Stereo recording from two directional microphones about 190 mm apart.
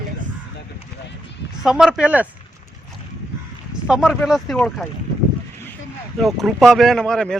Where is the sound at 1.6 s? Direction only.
5° right (ahead or behind).